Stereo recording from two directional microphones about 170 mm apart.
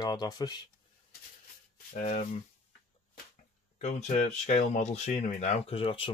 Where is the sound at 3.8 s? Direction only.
45° left (ahead or behind).